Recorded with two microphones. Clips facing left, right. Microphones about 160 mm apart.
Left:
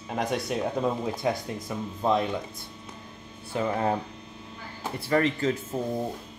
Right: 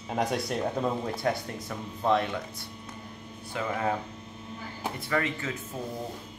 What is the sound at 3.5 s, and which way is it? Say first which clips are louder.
Speech: left 3 dB; 30° left (ahead or behind).